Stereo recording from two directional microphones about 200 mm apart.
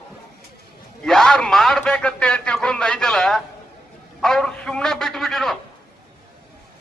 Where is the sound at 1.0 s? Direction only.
5° left (ahead or behind).